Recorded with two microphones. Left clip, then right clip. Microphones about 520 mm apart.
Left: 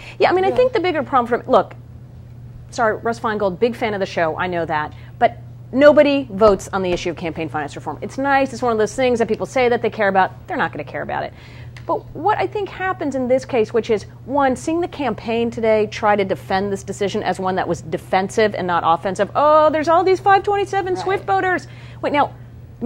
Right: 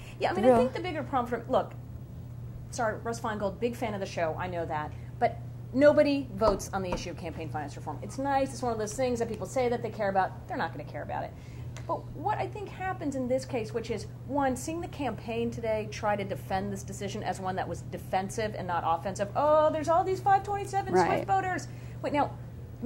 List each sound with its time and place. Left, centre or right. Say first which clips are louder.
0.0 s a sound: left 13 dB; left
0.7 s a woman's voice: left 14 dB; left
2.7 s a woman's voice: left 13 dB; left